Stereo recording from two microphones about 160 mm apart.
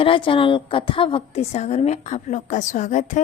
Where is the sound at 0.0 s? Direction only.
30° left (ahead or behind).